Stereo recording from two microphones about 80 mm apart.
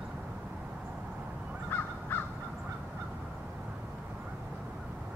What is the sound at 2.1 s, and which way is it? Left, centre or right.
Crow, left.